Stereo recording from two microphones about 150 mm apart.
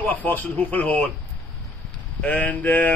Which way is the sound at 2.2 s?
10° left (ahead or behind).